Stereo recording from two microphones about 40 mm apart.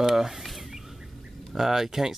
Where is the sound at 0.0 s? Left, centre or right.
Centre.